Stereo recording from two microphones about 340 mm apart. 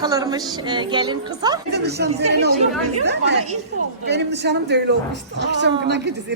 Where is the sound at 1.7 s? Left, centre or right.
Right.